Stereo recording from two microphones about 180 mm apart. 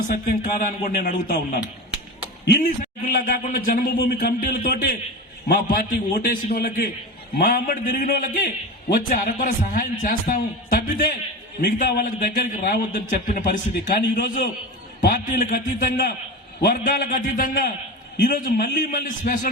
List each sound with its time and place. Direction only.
0.1 s a man's voice: 50° left (ahead or behind)